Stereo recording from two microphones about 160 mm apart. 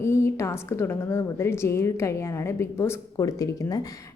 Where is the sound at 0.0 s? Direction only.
15° left (ahead or behind).